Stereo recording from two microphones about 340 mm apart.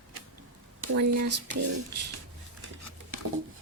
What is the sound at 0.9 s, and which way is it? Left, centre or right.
Speech, right.